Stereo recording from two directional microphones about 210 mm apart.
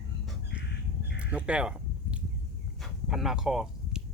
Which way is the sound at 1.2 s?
5° right (ahead or behind).